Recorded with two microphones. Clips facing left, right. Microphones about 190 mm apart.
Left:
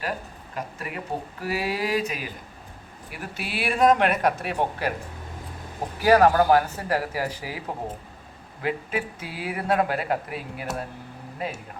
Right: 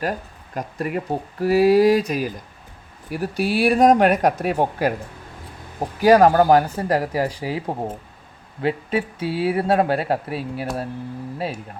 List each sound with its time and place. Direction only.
0.5 s speech: 45° right (ahead or behind)
6.1 s speech: 35° right (ahead or behind)